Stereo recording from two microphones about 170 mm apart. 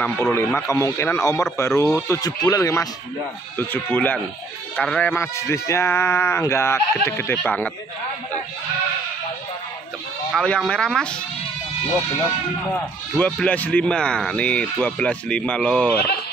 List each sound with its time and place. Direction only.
0.0 s speech: 15° left (ahead or behind)
10.3 s speech: 5° left (ahead or behind)
13.2 s speech: 10° left (ahead or behind)